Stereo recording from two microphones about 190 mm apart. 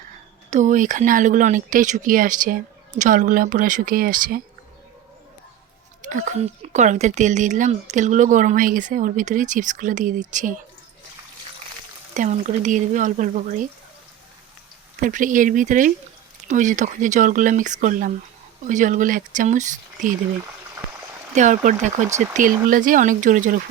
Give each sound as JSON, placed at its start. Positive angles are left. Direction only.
{"t": 0.5, "sound": "speech", "side_deg": -40}
{"t": 6.1, "sound": "speech", "side_deg": -40}
{"t": 12.1, "sound": "speech", "side_deg": -40}
{"t": 15.0, "sound": "speech", "side_deg": -45}
{"t": 21.3, "sound": "speech", "side_deg": -40}